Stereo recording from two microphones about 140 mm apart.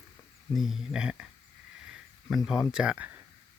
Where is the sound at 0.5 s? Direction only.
Centre (ahead or behind).